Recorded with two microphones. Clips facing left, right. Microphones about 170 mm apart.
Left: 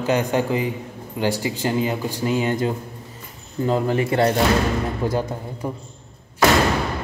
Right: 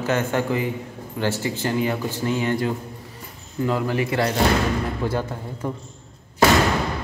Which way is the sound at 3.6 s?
30° left (ahead or behind).